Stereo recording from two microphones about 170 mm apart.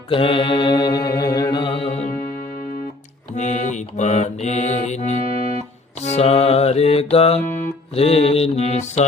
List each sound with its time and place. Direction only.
0.1 s mantra: 30° left (ahead or behind)
3.3 s mantra: 45° left (ahead or behind)
6.1 s music: 35° left (ahead or behind)